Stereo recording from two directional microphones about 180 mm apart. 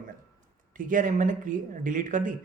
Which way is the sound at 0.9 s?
45° right (ahead or behind).